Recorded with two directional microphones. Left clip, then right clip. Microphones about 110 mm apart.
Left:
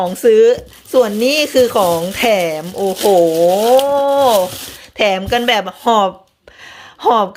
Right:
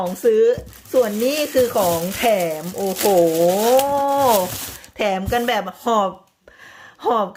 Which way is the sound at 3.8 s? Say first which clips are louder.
Left 5 dB; 15° right (ahead or behind).